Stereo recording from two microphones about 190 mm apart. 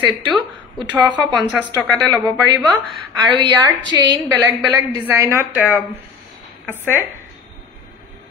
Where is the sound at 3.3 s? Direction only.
20° right (ahead or behind).